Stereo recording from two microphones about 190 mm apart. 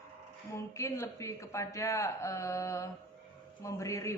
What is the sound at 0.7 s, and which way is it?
Speech, 15° left (ahead or behind).